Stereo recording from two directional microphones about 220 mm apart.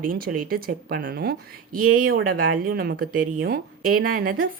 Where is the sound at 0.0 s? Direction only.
40° right (ahead or behind).